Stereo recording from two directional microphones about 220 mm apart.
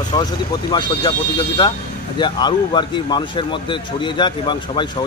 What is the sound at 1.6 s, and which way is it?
A man's voice, 20° left (ahead or behind).